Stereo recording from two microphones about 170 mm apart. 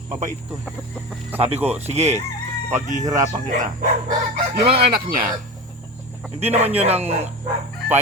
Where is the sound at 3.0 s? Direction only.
20° right (ahead or behind).